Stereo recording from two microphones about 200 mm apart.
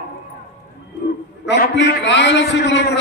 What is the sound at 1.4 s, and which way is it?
A man's voice, 60° left (ahead or behind).